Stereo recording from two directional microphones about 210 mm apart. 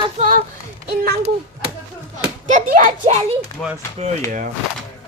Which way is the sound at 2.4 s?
40° right (ahead or behind).